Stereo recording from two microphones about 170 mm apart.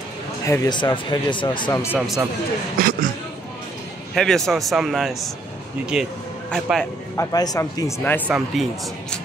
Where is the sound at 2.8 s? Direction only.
60° right (ahead or behind).